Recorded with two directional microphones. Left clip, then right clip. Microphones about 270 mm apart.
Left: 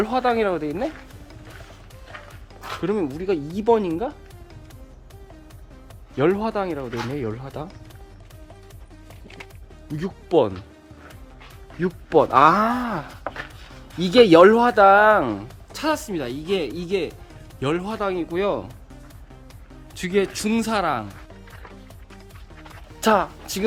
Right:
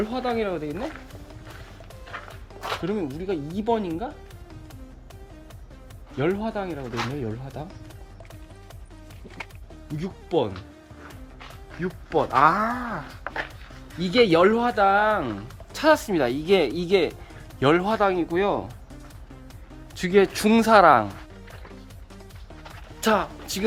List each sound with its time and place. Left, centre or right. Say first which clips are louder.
0.0 s speech: left 6 dB; centre
2.8 s speech: left 9 dB; centre
6.1 s speech: left 5 dB; centre
10.2 s speech: left 6 dB; centre
11.8 s speech: left 6 dB; left
14.0 s speech: left 6 dB; centre
15.7 s speech: right 5 dB; centre
20.0 s speech: right 3 dB; centre
23.0 s speech: left 4 dB; centre